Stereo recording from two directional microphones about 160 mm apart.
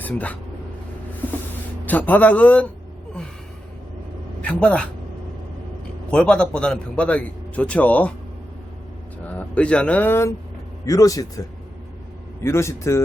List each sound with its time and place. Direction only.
0.0 s speech: 10° left (ahead or behind)
1.8 s a man's voice: 10° left (ahead or behind)
4.4 s a man's voice: 5° left (ahead or behind)
6.1 s a man's voice: 5° left (ahead or behind)
9.2 s a man's voice: 10° left (ahead or behind)